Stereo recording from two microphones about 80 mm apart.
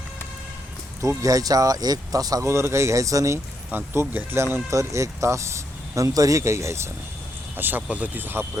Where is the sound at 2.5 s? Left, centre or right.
Right.